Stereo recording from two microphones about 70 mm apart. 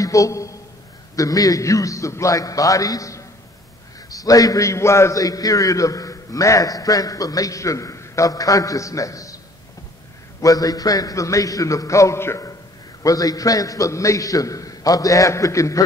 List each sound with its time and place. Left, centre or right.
0.0 s a sound: left
1.1 s a man's voice: left
5.2 s a man's voice: left
10.4 s a man's voice: left
13.0 s a man's voice: left